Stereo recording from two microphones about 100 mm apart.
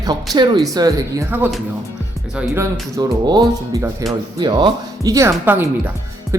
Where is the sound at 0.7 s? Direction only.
40° right (ahead or behind).